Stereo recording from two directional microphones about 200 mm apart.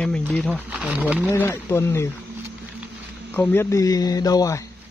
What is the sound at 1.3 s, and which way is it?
Speech, 10° left (ahead or behind).